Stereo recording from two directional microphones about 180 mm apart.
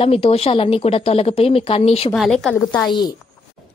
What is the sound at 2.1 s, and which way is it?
Speech, centre (ahead or behind).